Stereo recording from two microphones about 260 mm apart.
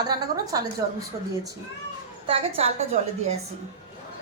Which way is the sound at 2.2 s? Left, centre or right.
Right.